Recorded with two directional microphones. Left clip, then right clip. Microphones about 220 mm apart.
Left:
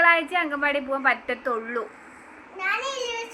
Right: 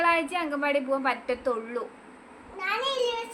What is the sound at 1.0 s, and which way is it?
Speech, centre (ahead or behind).